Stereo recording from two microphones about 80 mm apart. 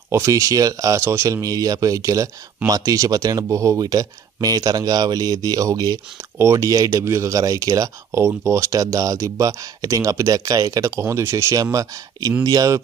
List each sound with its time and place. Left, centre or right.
0.1 s speech: right
3.8 s speech: right
6.3 s speech: right